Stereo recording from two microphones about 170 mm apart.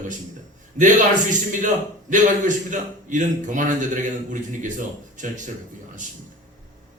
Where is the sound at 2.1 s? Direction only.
50° right (ahead or behind).